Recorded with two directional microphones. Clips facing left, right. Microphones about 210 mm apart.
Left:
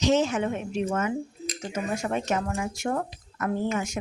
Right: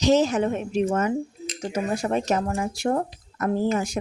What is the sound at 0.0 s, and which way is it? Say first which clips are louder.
Speech: right 4 dB; 35° right (ahead or behind).